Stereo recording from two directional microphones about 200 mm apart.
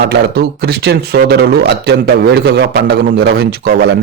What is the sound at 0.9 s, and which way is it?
A man's voice, 55° right (ahead or behind).